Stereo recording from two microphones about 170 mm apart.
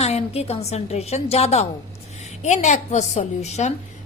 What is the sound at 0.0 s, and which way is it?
A woman's voice, 40° left (ahead or behind).